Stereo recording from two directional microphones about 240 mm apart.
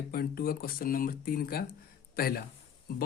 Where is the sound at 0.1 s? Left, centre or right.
Left.